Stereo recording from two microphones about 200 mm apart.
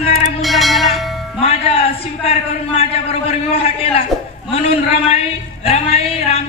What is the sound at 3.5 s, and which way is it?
A man's voice, 30° left (ahead or behind).